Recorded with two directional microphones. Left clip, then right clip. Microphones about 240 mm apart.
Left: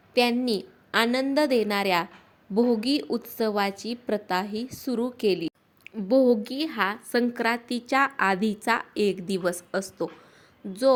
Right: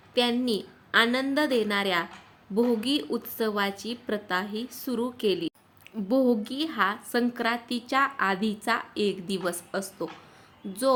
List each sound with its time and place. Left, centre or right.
0.1 s a woman's voice: left